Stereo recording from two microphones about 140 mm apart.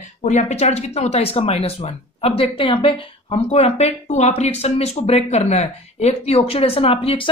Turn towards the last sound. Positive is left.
turn(degrees=40)  # may be behind; listen again after turning